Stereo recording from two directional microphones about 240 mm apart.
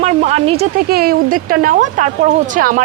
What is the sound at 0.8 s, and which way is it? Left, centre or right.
A woman's voice, right.